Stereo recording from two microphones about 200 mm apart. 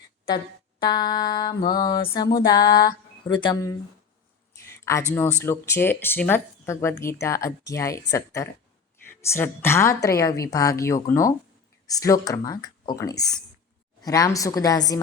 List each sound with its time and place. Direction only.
0.9 s speech: 20° left (ahead or behind)
4.6 s a sound: 15° left (ahead or behind)
5.1 s a woman's voice: 10° left (ahead or behind)